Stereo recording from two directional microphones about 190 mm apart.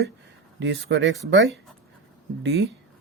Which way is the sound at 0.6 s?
70° right (ahead or behind).